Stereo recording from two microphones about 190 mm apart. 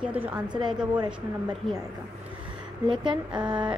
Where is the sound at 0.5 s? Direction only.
25° right (ahead or behind).